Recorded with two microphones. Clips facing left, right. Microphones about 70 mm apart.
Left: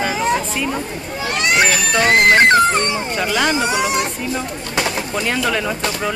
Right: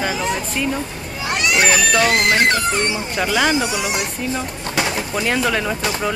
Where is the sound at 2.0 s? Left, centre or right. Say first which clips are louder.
Left 9 dB; left.